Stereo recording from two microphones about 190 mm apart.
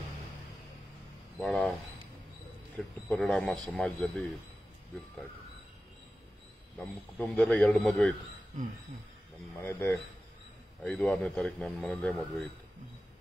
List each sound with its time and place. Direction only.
1.4 s a man's voice: 5° left (ahead or behind)
3.1 s a man's voice: 5° left (ahead or behind)
6.8 s a man's voice: 5° left (ahead or behind)
9.6 s a man's voice: 15° left (ahead or behind)